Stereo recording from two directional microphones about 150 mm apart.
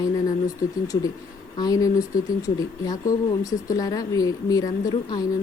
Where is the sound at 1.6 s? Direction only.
25° left (ahead or behind).